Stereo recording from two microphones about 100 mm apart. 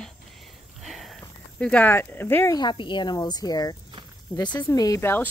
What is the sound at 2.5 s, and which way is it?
Speech, 45° left (ahead or behind).